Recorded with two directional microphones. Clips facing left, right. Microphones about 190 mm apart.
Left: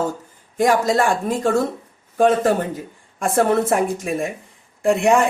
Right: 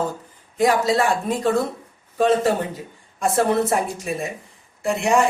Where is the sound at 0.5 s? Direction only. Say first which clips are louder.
Left 1 dB; 45° left (ahead or behind).